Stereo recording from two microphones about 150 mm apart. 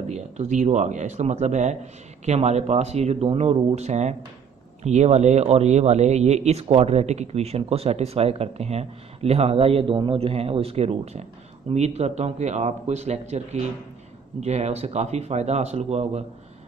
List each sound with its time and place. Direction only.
0.1 s speech: 50° right (ahead or behind)